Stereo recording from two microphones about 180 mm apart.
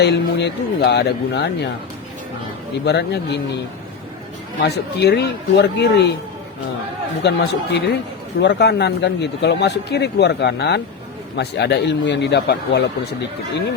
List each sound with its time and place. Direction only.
0.0 s speech: 70° left (ahead or behind)
2.8 s speech: 70° left (ahead or behind)
4.6 s speech: 65° left (ahead or behind)
7.2 s speech: 70° left (ahead or behind)